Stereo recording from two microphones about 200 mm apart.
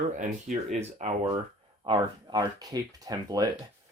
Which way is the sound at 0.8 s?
35° right (ahead or behind).